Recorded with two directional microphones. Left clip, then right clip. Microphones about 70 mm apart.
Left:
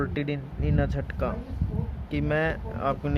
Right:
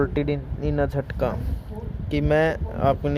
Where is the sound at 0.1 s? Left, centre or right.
Right.